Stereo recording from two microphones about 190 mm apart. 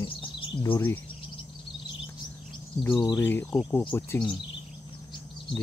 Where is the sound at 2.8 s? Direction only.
20° left (ahead or behind).